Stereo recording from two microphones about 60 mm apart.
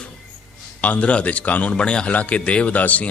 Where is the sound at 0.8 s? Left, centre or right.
Left.